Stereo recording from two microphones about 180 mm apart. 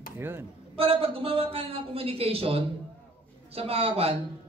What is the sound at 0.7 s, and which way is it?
Speech, 30° right (ahead or behind).